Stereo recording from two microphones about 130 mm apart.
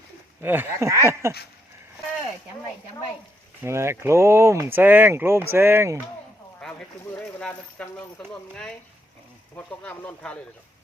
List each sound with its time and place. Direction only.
0.4 s speech: 15° right (ahead or behind)
3.6 s speech: 20° right (ahead or behind)
6.6 s speech: 10° left (ahead or behind)
9.6 s speech: 10° left (ahead or behind)